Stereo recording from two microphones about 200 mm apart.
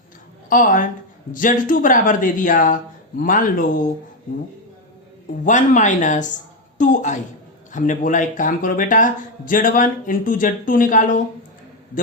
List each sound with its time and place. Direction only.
0.5 s speech: 40° left (ahead or behind)
5.5 s a woman's voice: 40° left (ahead or behind)